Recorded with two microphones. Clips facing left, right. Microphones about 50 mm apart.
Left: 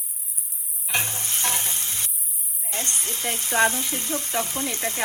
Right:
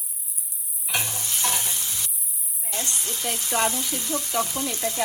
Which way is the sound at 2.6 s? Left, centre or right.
Left.